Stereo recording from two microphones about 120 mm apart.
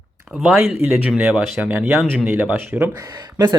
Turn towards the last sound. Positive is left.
turn(degrees=-35)  # may be behind; listen again after turning